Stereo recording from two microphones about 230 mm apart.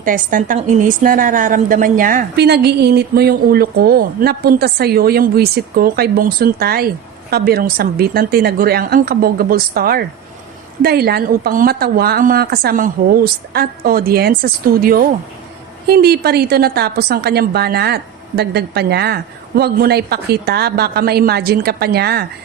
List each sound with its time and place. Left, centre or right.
0.0 s a woman's voice: right